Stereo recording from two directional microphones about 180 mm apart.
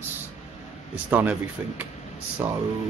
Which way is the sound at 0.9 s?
10° right (ahead or behind).